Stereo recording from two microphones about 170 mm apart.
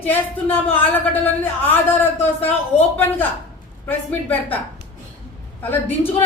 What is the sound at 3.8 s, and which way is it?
Speech, 10° left (ahead or behind).